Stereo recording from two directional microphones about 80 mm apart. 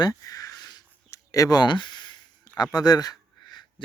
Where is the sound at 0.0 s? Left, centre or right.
Left.